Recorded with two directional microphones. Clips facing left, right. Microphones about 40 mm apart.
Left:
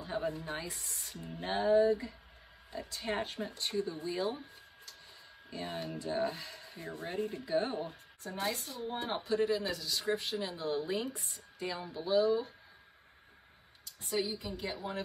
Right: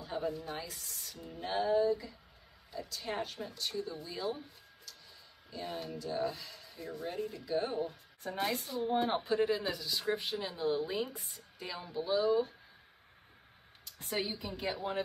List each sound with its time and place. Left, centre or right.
0.0 s speech: left
0.7 s speech: left
5.5 s speech: left
8.3 s speech: right; by 12.3 s centre
13.9 s a woman's voice: right